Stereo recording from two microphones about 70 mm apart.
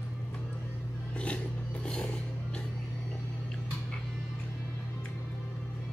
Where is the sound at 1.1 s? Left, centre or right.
Centre.